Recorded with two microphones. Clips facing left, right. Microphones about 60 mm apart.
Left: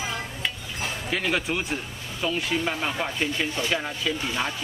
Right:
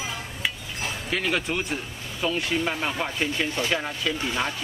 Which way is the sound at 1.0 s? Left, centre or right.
Centre.